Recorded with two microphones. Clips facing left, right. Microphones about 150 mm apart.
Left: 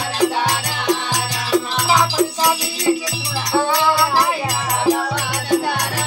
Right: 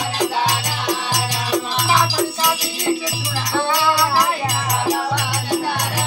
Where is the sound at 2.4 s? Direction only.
10° left (ahead or behind).